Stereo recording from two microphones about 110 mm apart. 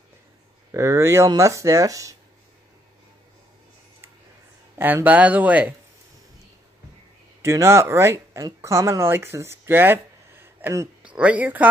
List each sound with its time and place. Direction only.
0.7 s speech: 25° right (ahead or behind)
4.7 s speech: 20° right (ahead or behind)
7.4 s speech: 25° right (ahead or behind)
11.1 s speech: 15° right (ahead or behind)